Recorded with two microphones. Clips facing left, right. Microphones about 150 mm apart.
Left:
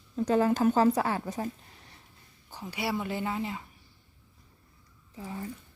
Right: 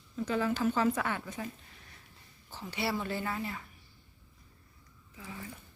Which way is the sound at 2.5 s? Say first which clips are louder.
Left 2 dB; 15° left (ahead or behind).